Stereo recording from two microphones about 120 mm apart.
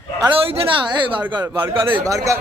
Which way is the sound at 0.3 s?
50° right (ahead or behind).